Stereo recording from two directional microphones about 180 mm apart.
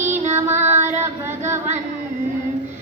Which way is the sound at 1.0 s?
15° right (ahead or behind).